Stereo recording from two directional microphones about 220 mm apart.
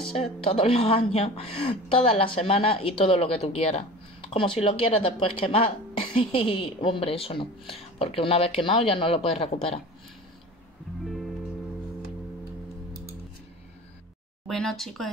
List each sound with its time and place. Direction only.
0.1 s a woman's voice: 25° left (ahead or behind)
11.1 s music: centre (ahead or behind)
14.5 s speech: centre (ahead or behind)